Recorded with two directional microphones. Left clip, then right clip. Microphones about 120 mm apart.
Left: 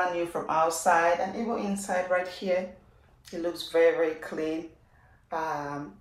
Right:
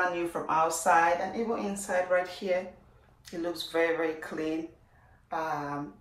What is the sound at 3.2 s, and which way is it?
Speech, centre (ahead or behind).